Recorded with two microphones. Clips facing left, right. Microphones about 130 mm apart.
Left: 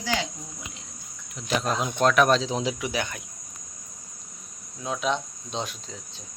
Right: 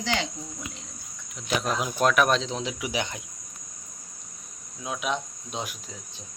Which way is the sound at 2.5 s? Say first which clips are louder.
Left 4 dB; 10° left (ahead or behind).